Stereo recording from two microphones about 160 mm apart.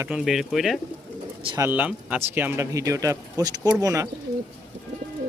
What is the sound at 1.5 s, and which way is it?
Speech, 10° right (ahead or behind).